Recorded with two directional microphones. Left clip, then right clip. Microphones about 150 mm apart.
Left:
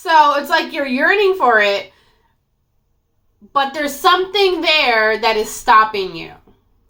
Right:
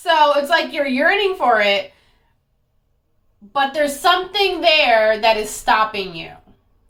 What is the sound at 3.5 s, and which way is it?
A woman's voice, 10° right (ahead or behind).